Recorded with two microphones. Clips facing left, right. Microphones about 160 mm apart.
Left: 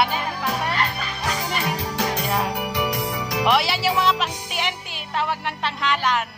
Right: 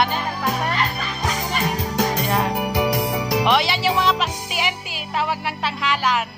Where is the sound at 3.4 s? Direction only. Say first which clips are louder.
Left 1 dB; 5° left (ahead or behind).